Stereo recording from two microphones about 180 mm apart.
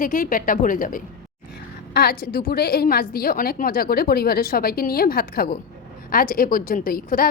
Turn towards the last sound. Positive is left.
turn(degrees=55)  # may be behind; listen again after turning